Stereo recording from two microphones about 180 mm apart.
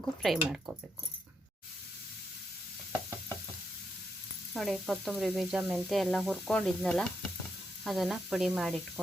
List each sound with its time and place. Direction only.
0.0 s speech: centre (ahead or behind)
4.5 s speech: centre (ahead or behind)